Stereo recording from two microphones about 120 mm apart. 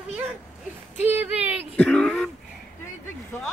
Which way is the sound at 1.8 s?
10° left (ahead or behind).